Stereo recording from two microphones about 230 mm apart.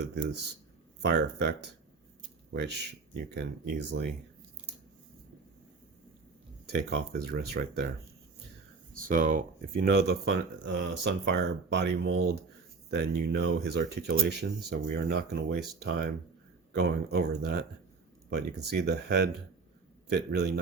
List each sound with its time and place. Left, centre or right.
1.0 s speech: right
2.5 s speech: right
6.7 s speech: right
9.0 s speech: right
18.7 s speech: right